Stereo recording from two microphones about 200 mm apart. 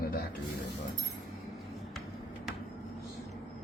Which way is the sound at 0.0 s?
50° left (ahead or behind).